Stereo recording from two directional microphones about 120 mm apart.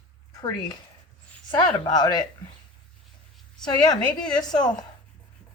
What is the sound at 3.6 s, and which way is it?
Speech, 35° left (ahead or behind).